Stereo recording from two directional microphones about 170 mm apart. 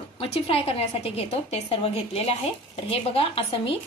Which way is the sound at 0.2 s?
35° left (ahead or behind).